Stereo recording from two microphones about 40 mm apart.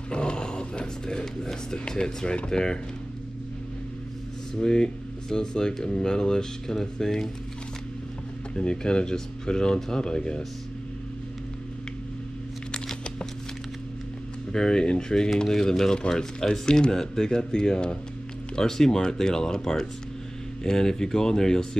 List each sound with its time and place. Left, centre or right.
0.1 s speech: left
4.6 s speech: centre
8.5 s speech: left
12.7 s a sound: centre
14.5 s speech: centre